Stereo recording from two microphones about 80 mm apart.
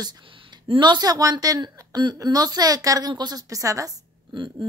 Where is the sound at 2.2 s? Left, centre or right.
Right.